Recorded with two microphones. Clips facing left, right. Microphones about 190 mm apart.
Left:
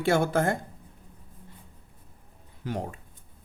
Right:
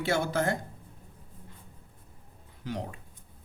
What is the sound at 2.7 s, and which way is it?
Speech, 50° left (ahead or behind).